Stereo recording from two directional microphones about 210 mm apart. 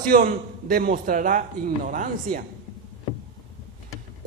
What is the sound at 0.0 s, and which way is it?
A man's voice, 40° right (ahead or behind).